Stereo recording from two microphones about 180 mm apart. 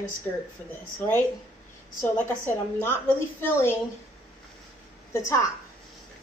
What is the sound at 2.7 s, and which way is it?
A woman's voice, 10° left (ahead or behind).